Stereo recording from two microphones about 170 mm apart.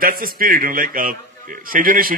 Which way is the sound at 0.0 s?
55° right (ahead or behind).